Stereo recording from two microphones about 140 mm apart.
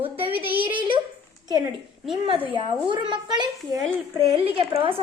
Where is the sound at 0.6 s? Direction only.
35° right (ahead or behind).